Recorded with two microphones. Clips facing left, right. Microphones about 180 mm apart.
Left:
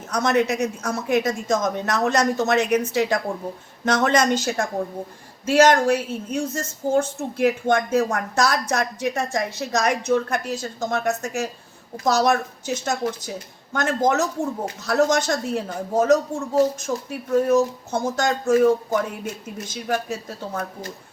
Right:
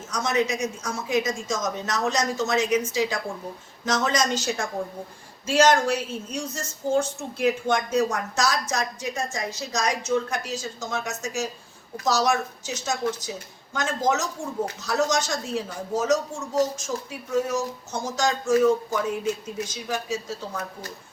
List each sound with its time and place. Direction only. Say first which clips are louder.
0.1 s a woman's voice: left 4 dB; 60° left (ahead or behind)